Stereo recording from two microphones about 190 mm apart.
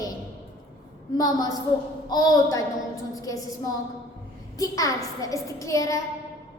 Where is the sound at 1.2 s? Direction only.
20° left (ahead or behind).